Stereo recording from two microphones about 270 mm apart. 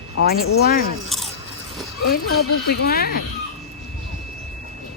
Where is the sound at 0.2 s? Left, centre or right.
Left.